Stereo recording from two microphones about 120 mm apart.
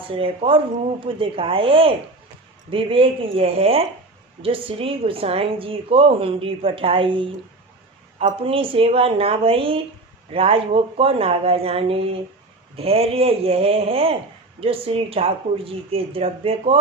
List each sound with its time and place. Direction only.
0.1 s a woman's voice: 50° right (ahead or behind)